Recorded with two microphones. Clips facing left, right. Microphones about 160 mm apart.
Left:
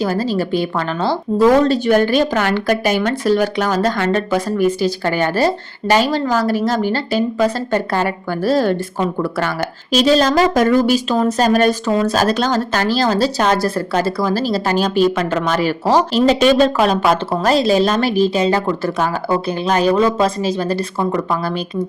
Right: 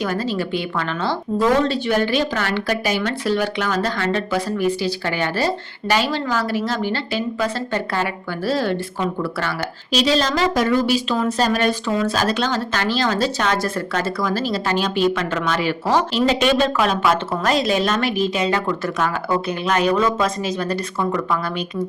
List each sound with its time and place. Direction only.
0.0 s a woman's voice: 35° left (ahead or behind)